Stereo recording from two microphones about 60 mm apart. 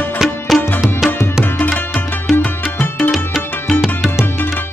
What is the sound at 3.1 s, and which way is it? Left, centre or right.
Music, centre.